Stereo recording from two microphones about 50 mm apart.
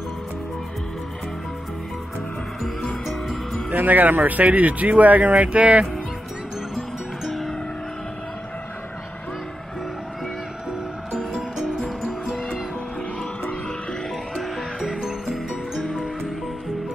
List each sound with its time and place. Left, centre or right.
3.1 s music: centre
3.7 s speech: right
7.2 s music: centre
11.1 s music: centre
14.3 s music: centre